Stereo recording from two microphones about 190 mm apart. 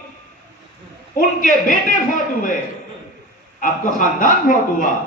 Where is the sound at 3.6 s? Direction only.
45° left (ahead or behind).